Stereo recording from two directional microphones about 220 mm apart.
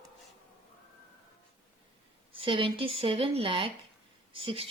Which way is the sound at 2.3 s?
25° right (ahead or behind).